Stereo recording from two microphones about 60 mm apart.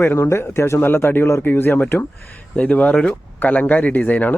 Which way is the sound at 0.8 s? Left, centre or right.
Left.